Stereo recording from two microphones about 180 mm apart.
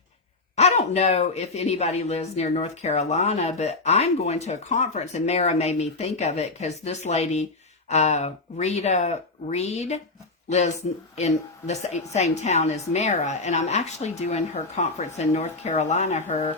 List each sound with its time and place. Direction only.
0.5 s speech: 40° left (ahead or behind)
11.2 s speech: 40° left (ahead or behind)